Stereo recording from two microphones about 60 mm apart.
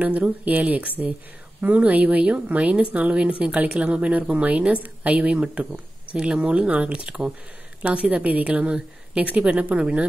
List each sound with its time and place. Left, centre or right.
0.5 s speech: right